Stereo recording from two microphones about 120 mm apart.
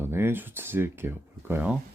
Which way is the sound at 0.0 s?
20° right (ahead or behind).